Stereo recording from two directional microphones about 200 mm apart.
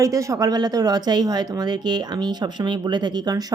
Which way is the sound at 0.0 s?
15° right (ahead or behind).